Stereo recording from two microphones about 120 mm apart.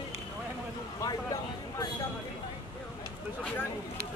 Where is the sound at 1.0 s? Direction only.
30° left (ahead or behind).